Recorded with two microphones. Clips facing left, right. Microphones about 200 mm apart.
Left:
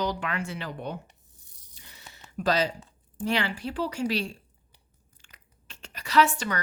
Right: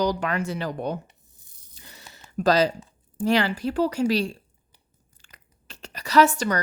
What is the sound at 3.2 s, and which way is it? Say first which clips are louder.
Speech: right 6 dB; 40° right (ahead or behind).